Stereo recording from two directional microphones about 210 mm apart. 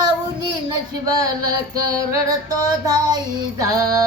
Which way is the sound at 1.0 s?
15° right (ahead or behind).